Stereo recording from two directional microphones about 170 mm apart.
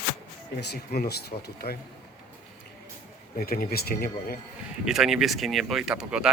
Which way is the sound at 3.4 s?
60° left (ahead or behind).